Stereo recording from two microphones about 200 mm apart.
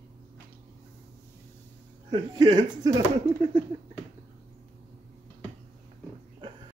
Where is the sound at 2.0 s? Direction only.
25° right (ahead or behind).